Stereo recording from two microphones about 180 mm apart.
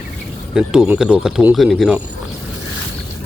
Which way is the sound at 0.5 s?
5° right (ahead or behind).